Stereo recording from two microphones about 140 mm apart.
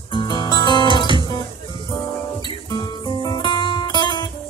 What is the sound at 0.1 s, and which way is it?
Music, 30° left (ahead or behind).